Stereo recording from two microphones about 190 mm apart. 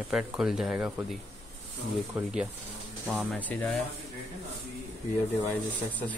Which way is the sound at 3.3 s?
5° left (ahead or behind).